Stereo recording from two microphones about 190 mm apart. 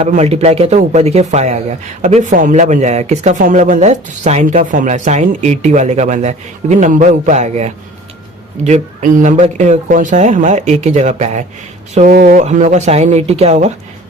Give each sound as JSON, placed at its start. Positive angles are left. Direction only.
{"t": 0.0, "sound": "speech", "side_deg": -35}
{"t": 11.9, "sound": "speech", "side_deg": -45}